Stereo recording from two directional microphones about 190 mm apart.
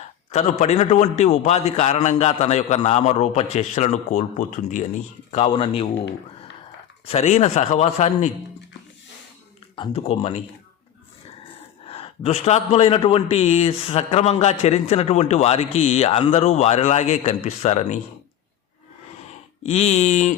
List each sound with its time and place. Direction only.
0.3 s a man's voice: 35° left (ahead or behind)
5.3 s speech: 30° left (ahead or behind)
7.1 s a man's voice: 35° left (ahead or behind)
9.7 s a man's voice: 30° left (ahead or behind)
11.9 s a man's voice: 35° left (ahead or behind)
19.3 s speech: 35° left (ahead or behind)